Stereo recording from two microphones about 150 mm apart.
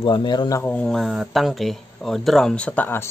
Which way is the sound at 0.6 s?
10° left (ahead or behind).